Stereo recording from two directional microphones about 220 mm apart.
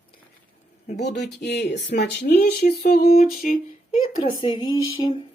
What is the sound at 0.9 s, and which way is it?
Speech, 50° left (ahead or behind).